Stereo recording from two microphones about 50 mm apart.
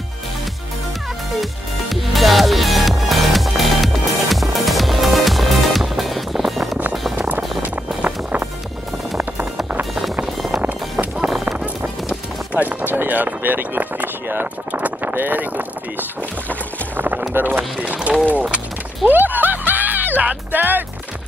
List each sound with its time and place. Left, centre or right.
1.4 s music: centre
7.6 s music: right
10.3 s music: centre
10.6 s music: right
11.2 s a sound: centre
12.5 s a sound: right
16.9 s boat: right
17.3 s speech: right
17.7 s run: right
19.0 s music: right